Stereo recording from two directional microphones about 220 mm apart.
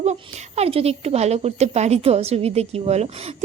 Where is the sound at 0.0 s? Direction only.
30° right (ahead or behind).